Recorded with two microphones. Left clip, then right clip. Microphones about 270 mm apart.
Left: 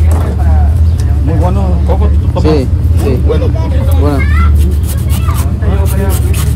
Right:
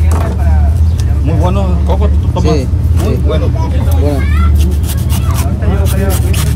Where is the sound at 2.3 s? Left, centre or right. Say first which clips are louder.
Left 4 dB; centre.